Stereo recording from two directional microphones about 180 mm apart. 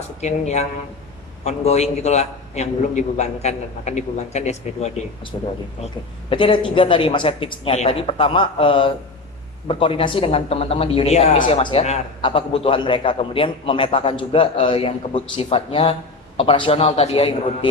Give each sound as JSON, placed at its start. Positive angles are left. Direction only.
{"t": 0.2, "sound": "a man's voice", "side_deg": 40}
{"t": 6.3, "sound": "a man's voice", "side_deg": 25}
{"t": 11.3, "sound": "a man's voice", "side_deg": 25}